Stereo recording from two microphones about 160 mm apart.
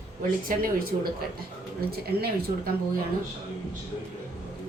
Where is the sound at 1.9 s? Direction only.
75° right (ahead or behind).